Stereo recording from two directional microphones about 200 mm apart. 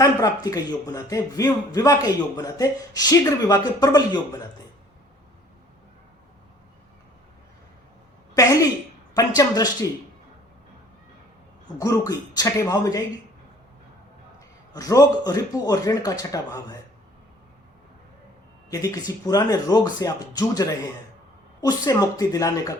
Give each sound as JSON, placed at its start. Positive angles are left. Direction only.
{"t": 0.0, "sound": "a man's voice", "side_deg": 15}
{"t": 8.4, "sound": "a man's voice", "side_deg": 15}
{"t": 11.8, "sound": "a man's voice", "side_deg": 15}
{"t": 14.7, "sound": "a man's voice", "side_deg": 20}
{"t": 18.7, "sound": "a man's voice", "side_deg": 15}